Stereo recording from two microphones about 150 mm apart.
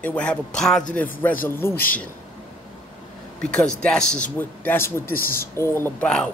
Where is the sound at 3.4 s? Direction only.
5° left (ahead or behind).